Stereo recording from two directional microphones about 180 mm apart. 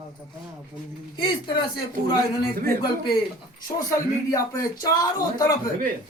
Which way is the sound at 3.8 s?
20° left (ahead or behind).